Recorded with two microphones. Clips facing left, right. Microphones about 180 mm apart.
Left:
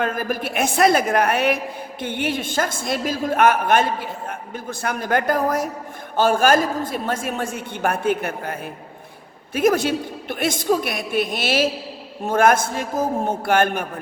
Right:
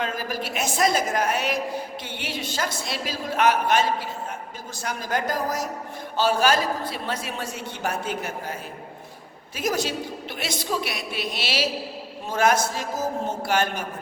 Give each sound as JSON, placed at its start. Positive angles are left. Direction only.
{"t": 0.0, "sound": "a man's voice", "side_deg": 55}
{"t": 9.6, "sound": "a woman's voice", "side_deg": 55}